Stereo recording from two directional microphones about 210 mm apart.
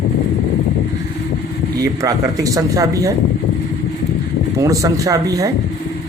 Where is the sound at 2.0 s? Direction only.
15° right (ahead or behind).